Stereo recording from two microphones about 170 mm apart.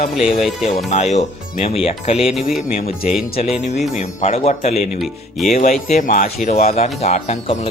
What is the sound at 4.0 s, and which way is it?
Speech, 35° left (ahead or behind).